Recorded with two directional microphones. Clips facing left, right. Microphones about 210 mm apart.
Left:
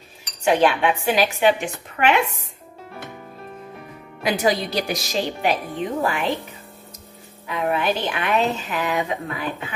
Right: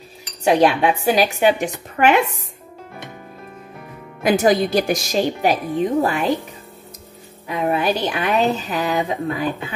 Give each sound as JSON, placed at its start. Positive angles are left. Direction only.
{"t": 0.4, "sound": "speech", "side_deg": -35}
{"t": 4.2, "sound": "speech", "side_deg": -50}
{"t": 7.4, "sound": "speech", "side_deg": -35}